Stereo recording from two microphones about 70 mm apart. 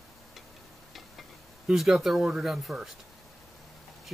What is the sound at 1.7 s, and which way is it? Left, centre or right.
Speech, centre.